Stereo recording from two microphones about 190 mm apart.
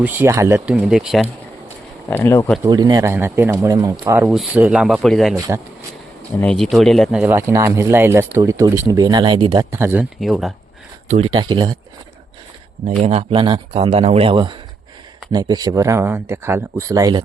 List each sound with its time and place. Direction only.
0.0 s speech: 10° right (ahead or behind)
2.0 s speech: 10° left (ahead or behind)
2.6 s speech: 20° right (ahead or behind); by 5.4 s centre (ahead or behind)
6.4 s speech: 5° left (ahead or behind); by 9.6 s 25° right (ahead or behind)
9.7 s speech: 10° right (ahead or behind)
10.2 s speech: centre (ahead or behind)
11.1 s speech: 30° right (ahead or behind)
13.0 s speech: 30° right (ahead or behind)